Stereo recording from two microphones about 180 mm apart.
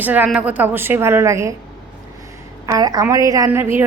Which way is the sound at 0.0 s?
10° right (ahead or behind).